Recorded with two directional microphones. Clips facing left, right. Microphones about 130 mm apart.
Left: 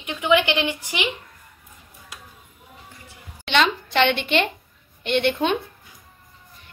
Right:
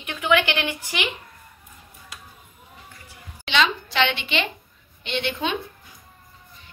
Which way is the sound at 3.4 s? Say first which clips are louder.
Left 2 dB; 55° left (ahead or behind).